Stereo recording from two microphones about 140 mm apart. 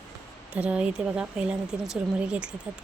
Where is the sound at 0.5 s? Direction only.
10° right (ahead or behind).